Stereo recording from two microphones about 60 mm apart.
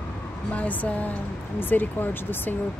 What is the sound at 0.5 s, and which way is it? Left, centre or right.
Speech, left.